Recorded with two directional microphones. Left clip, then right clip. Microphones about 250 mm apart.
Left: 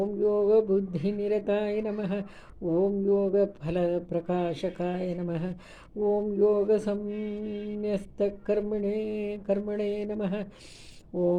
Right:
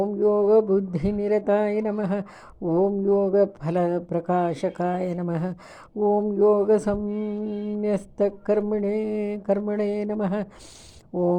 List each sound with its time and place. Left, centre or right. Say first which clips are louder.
0.0 s mantra: right 5 dB; right
11.1 s speech: right 3 dB; right